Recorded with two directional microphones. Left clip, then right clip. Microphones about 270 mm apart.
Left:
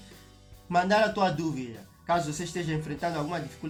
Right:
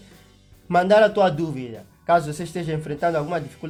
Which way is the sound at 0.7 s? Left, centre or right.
Right.